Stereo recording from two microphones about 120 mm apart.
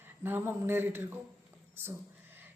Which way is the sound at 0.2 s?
20° right (ahead or behind).